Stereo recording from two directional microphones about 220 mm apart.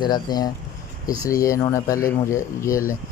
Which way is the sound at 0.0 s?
20° left (ahead or behind).